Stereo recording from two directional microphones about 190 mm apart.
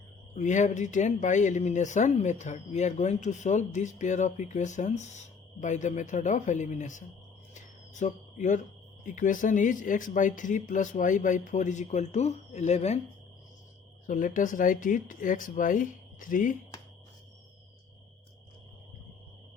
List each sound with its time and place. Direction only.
0.3 s speech: 40° left (ahead or behind)
7.5 s a sound: 40° left (ahead or behind)
9.0 s speech: 45° left (ahead or behind)
14.1 s speech: 45° left (ahead or behind)